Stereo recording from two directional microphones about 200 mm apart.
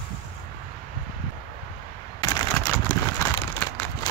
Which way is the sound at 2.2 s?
15° left (ahead or behind).